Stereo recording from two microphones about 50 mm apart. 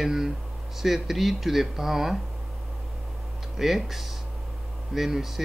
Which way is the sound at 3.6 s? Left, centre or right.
Centre.